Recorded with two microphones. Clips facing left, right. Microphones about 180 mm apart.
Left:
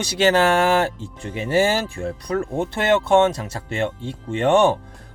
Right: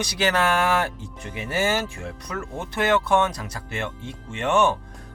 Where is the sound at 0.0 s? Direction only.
30° left (ahead or behind).